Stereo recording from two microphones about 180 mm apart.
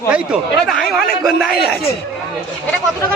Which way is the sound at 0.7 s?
Centre (ahead or behind).